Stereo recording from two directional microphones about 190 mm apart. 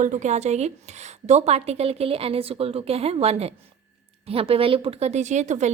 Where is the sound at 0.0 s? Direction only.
40° right (ahead or behind).